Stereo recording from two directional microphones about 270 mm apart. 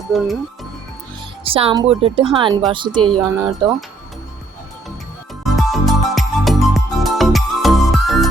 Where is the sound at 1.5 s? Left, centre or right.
Right.